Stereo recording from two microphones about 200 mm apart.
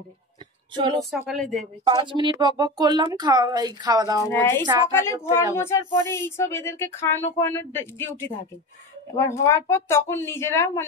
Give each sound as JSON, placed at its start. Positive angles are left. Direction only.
{"t": 1.1, "sound": "speech", "side_deg": 0}
{"t": 1.9, "sound": "speech", "side_deg": -25}
{"t": 4.3, "sound": "speech", "side_deg": 10}
{"t": 4.6, "sound": "speech", "side_deg": -20}
{"t": 4.9, "sound": "speech", "side_deg": 15}
{"t": 9.3, "sound": "speech", "side_deg": 15}